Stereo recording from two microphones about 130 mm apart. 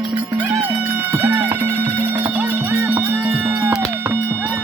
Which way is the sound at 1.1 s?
15° right (ahead or behind).